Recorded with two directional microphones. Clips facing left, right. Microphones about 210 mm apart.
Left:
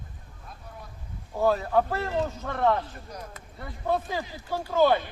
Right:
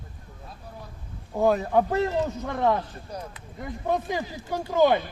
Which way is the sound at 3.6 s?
15° right (ahead or behind).